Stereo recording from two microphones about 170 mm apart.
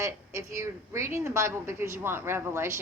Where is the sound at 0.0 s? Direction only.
15° right (ahead or behind).